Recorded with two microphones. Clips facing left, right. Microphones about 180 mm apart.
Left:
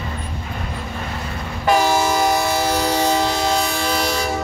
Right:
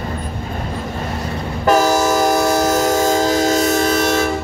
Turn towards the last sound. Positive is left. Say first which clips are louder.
# right 6 dB
turn(degrees=-45)  # may be behind; listen again after turning